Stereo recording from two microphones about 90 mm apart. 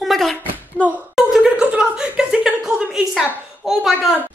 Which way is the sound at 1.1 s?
5° right (ahead or behind).